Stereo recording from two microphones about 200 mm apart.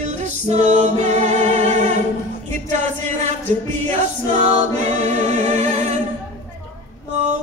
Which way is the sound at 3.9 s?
35° right (ahead or behind).